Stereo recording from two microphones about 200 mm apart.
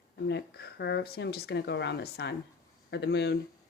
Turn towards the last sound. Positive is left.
turn(degrees=60)  # may be behind; listen again after turning